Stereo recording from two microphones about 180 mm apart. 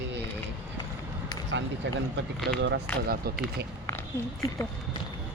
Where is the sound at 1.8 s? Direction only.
90° right.